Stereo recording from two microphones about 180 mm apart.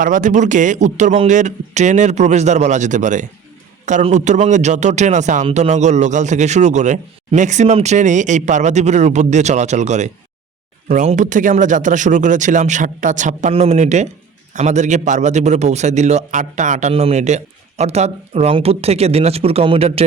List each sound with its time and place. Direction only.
0.0 s a man's voice: 45° right (ahead or behind)